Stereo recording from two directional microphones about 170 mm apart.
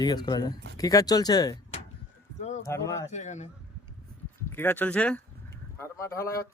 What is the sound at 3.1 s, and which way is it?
Speech, 45° left (ahead or behind).